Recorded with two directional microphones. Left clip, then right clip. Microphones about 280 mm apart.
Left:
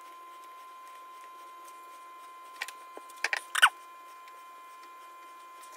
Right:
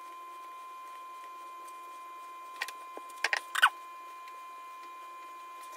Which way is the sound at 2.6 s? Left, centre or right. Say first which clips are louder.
Right 1 dB; centre.